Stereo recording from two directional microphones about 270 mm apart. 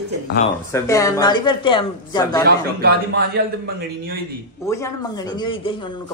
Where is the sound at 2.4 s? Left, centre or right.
Right.